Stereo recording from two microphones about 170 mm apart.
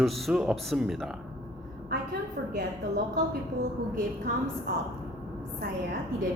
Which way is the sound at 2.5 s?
65° right (ahead or behind).